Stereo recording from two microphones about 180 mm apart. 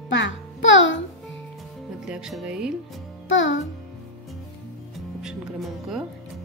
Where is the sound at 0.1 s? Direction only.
90° left.